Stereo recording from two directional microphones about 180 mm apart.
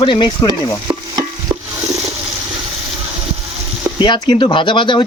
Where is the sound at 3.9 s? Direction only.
25° left (ahead or behind).